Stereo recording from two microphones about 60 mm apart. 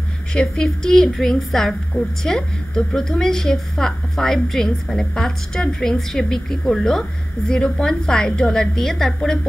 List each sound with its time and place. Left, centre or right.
0.3 s a woman's voice: centre